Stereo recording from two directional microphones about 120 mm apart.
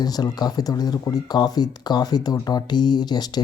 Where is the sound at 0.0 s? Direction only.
35° left (ahead or behind).